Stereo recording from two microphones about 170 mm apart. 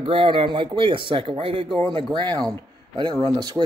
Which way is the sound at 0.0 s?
30° right (ahead or behind).